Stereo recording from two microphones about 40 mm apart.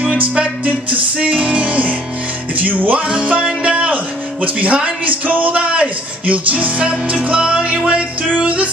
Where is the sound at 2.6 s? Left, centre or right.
Right.